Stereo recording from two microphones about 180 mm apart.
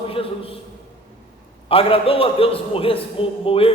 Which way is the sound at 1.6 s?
30° left (ahead or behind).